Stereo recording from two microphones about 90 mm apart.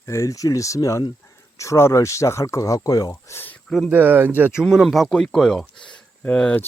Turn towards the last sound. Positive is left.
turn(degrees=15)  # may be behind; listen again after turning